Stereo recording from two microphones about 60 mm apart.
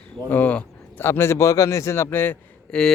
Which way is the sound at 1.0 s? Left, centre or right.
Left.